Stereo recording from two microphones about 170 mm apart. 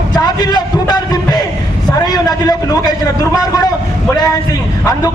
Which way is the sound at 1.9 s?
25° left (ahead or behind).